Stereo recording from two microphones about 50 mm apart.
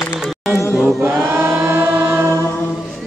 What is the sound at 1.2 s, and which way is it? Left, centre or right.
Choir, right.